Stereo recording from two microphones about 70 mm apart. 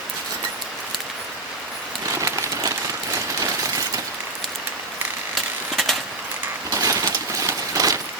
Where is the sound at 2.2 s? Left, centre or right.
Right.